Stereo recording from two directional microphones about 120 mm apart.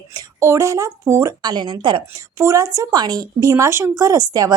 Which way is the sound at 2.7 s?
35° right (ahead or behind).